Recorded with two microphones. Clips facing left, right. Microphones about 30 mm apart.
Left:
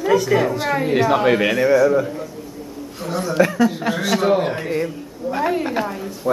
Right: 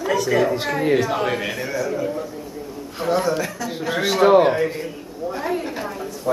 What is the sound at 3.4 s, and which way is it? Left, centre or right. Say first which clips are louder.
Speech: left 11 dB; left.